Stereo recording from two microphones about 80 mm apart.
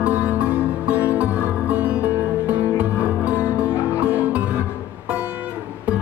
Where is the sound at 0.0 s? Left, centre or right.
Centre.